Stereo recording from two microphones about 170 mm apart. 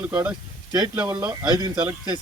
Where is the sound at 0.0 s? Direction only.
10° right (ahead or behind).